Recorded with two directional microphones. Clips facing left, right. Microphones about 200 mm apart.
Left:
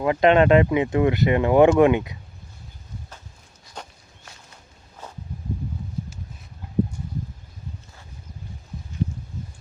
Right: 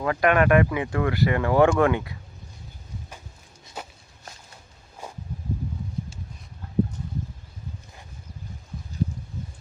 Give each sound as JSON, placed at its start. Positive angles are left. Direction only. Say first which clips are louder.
{"t": 0.0, "sound": "speech", "louder": "left 4 dB", "side_deg": 20}
{"t": 3.8, "sound": "walk", "louder": "right 1 dB", "side_deg": -5}
{"t": 5.0, "sound": "a sound", "louder": "right 2 dB", "side_deg": -10}